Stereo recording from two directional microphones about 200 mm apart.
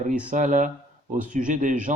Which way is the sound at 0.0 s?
40° right (ahead or behind).